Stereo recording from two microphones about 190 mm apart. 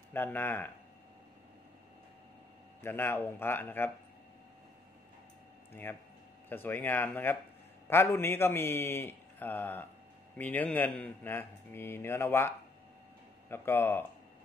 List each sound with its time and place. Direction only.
0.1 s a man's voice: 10° left (ahead or behind)
2.8 s a man's voice: 10° left (ahead or behind)
5.7 s a man's voice: 10° left (ahead or behind)